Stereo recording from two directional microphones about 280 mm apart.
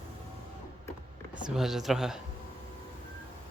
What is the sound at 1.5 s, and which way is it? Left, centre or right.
Speech, centre.